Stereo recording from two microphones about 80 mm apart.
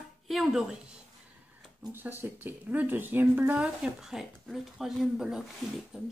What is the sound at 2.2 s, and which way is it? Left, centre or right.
Speech, right.